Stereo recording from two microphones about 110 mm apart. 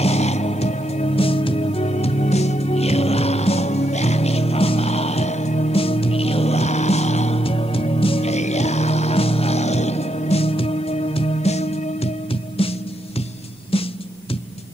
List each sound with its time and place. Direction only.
0.0 s music: 75° left (ahead or behind)
12.6 s music: 60° left (ahead or behind)